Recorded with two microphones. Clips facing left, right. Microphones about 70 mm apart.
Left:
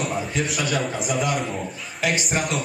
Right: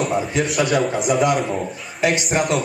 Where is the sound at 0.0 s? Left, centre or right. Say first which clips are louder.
Right 5 dB; centre.